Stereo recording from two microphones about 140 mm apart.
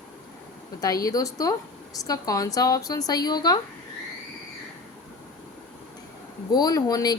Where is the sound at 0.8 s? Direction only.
25° left (ahead or behind).